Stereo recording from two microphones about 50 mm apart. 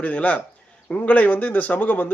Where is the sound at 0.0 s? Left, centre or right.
Left.